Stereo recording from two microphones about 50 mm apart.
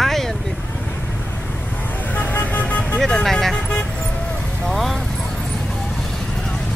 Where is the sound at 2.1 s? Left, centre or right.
Left.